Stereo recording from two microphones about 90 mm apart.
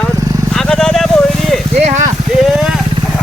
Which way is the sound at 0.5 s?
5° left (ahead or behind).